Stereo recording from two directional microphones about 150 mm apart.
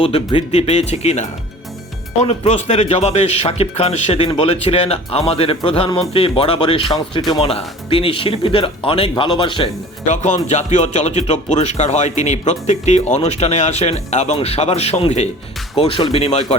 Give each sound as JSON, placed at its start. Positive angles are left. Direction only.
{"t": 0.5, "sound": "a man's voice", "side_deg": 45}
{"t": 7.2, "sound": "speech", "side_deg": 0}
{"t": 7.9, "sound": "a man's voice", "side_deg": 35}
{"t": 10.1, "sound": "a man's voice", "side_deg": 50}